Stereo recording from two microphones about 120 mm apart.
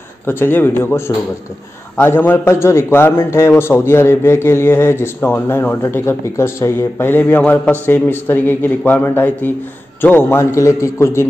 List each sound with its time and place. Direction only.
0.3 s a man's voice: 20° left (ahead or behind)